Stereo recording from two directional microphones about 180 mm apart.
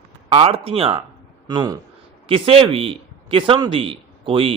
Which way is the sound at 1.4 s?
20° right (ahead or behind).